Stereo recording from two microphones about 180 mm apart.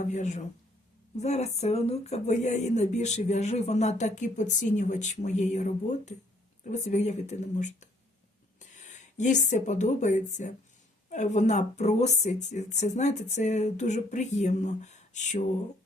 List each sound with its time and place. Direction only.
0.0 s speech: 40° left (ahead or behind)